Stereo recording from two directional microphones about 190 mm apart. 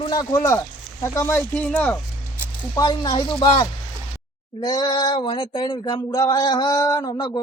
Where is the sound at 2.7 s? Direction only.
20° left (ahead or behind).